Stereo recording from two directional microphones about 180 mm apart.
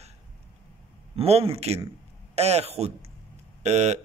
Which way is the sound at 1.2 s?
35° right (ahead or behind).